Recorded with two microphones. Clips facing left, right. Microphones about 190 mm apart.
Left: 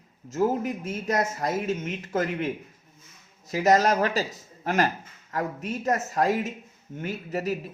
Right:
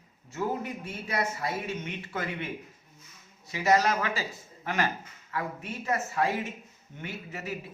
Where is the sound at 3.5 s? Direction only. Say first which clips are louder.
Left 4 dB; 40° left (ahead or behind).